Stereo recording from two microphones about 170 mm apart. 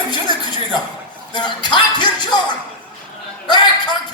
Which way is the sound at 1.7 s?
25° left (ahead or behind).